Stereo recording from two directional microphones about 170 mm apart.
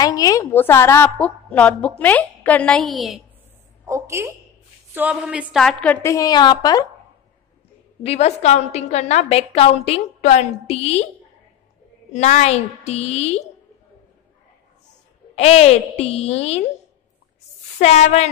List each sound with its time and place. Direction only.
0.0 s a woman's voice: 20° left (ahead or behind); by 3.2 s centre (ahead or behind)
3.8 s a woman's voice: 20° right (ahead or behind)
4.9 s a woman's voice: 5° right (ahead or behind)
6.0 s a woman's voice: 20° left (ahead or behind)
8.0 s a woman's voice: 40° left (ahead or behind)
12.1 s a woman's voice: 45° left (ahead or behind)
15.3 s a woman's voice: 40° left (ahead or behind)
17.7 s a woman's voice: 40° left (ahead or behind)